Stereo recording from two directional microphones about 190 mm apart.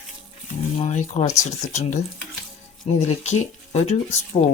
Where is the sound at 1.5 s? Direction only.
35° left (ahead or behind).